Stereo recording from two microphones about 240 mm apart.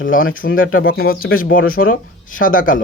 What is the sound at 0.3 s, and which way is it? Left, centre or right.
Speech, left.